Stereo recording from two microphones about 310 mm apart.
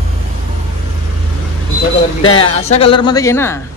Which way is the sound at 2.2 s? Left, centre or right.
Centre.